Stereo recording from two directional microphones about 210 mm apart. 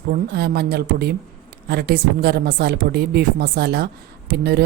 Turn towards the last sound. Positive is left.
turn(degrees=-50)  # may be behind; listen again after turning